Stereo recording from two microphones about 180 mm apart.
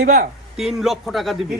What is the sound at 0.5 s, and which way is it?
Speech, centre (ahead or behind).